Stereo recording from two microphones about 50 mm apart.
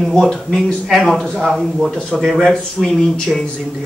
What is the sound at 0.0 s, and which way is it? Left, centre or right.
A man's voice, centre.